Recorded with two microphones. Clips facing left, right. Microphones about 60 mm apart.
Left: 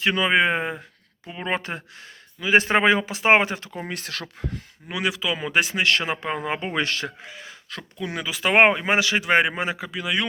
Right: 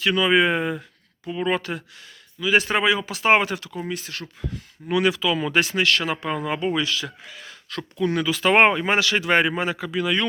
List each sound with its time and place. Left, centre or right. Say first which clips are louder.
0.0 s speech: right 1 dB; left
3.1 s speech: even; left
3.8 s speech: right 2 dB; left
4.9 s speech: right 5 dB; centre
5.8 s speech: even; left
6.7 s speech: even; left
7.2 s speech: left 1 dB; left
9.9 s speech: right 5 dB; centre